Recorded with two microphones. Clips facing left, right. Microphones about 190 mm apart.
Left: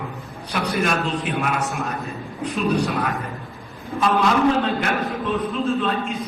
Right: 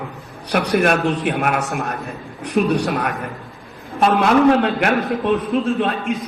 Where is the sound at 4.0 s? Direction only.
65° right (ahead or behind).